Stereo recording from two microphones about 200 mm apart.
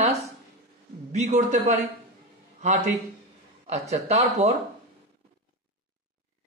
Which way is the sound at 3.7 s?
35° right (ahead or behind).